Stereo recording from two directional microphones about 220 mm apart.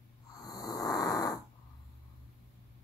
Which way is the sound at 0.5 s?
15° left (ahead or behind).